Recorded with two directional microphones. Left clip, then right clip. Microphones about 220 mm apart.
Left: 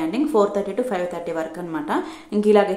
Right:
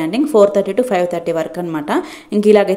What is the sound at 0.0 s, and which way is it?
A woman's voice, 25° right (ahead or behind).